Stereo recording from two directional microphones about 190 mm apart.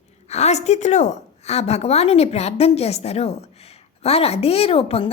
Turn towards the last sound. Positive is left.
turn(degrees=30)  # may be behind; listen again after turning